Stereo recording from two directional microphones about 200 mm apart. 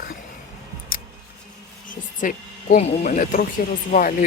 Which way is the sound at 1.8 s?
40° left (ahead or behind).